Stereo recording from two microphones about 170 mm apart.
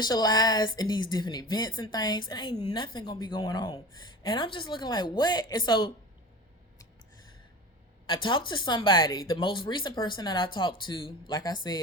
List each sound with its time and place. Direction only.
0.0 s speech: 25° left (ahead or behind)
8.0 s speech: 30° left (ahead or behind)